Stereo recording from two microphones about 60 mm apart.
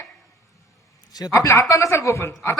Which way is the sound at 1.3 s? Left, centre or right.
Left.